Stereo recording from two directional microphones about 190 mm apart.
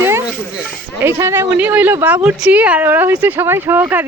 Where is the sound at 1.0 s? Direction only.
15° right (ahead or behind).